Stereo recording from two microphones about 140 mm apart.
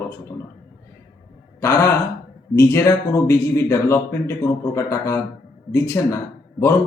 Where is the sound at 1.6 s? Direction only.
20° left (ahead or behind).